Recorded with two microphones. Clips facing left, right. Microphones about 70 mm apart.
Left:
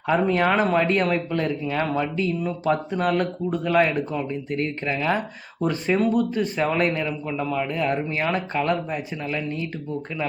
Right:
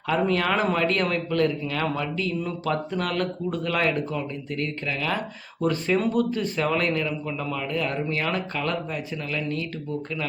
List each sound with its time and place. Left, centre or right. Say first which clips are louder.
0.1 s speech: left 3 dB; centre
4.5 s speech: left 3 dB; left